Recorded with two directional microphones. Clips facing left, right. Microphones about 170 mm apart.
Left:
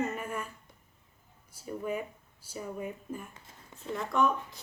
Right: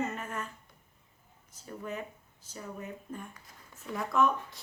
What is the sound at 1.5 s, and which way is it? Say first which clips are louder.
A woman's voice: left 5 dB; 10° left (ahead or behind).